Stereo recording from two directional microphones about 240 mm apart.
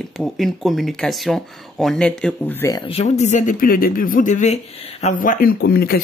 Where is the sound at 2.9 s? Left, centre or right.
Left.